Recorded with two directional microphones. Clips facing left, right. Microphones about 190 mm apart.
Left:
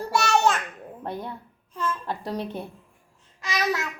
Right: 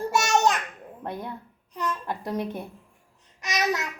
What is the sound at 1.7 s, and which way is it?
Babbling, 20° right (ahead or behind).